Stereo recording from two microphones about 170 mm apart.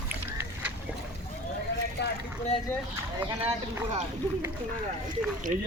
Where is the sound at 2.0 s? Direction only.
90° left.